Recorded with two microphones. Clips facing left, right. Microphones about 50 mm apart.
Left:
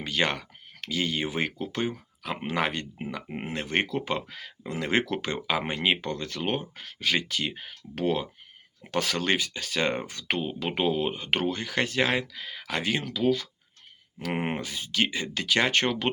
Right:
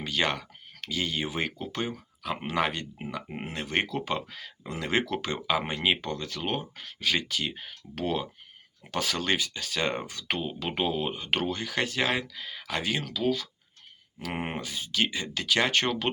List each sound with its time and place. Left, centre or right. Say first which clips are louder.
0.0 s speech: left 1 dB; left
3.2 s speech: left 2 dB; centre
3.5 s speech: left 2 dB; left
13.0 s speech: left 3 dB; left